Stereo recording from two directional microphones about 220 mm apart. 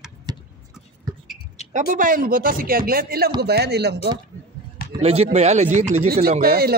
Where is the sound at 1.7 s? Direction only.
35° right (ahead or behind).